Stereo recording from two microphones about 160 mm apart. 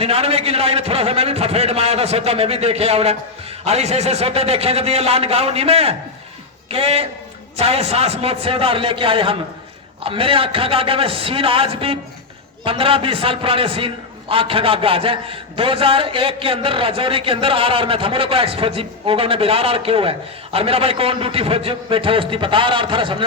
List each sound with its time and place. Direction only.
0.0 s a man's voice: 40° right (ahead or behind)